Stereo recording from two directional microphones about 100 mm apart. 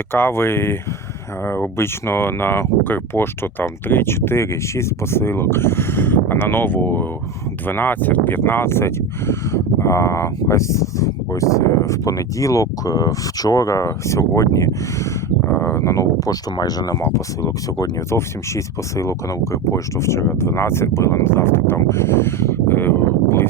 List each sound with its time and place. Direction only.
0.1 s speech: 25° left (ahead or behind)